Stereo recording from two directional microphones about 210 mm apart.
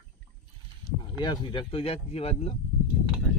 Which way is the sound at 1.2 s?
20° left (ahead or behind).